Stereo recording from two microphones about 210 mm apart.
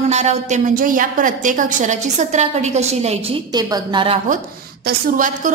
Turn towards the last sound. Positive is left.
turn(degrees=-40)  # may be behind; listen again after turning